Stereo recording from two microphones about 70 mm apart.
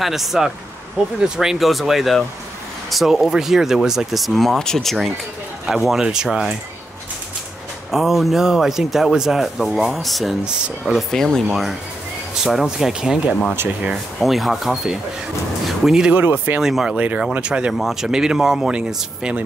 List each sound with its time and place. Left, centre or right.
0.0 s speech: centre
7.9 s speech: centre
11.1 s speech: centre
12.4 s speech: centre
16.1 s speech: right
16.5 s speech: centre
16.9 s speech: right